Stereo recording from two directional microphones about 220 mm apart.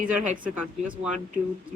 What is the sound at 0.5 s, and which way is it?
Speech, 5° right (ahead or behind).